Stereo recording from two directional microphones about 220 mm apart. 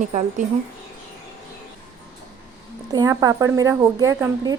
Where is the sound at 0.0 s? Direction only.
35° right (ahead or behind).